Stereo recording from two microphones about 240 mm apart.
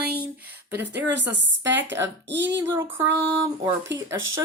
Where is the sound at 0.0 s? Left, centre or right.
Right.